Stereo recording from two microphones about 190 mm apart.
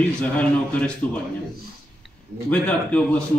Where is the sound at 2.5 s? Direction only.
5° left (ahead or behind).